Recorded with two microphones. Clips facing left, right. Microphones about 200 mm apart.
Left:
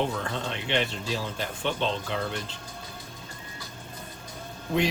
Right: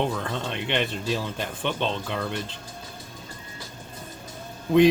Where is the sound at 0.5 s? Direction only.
55° right (ahead or behind).